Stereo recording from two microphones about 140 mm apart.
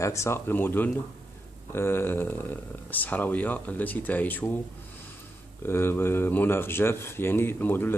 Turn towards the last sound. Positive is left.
turn(degrees=15)  # may be behind; listen again after turning